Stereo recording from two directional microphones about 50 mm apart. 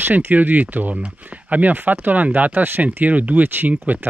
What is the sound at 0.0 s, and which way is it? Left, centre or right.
Speech, right.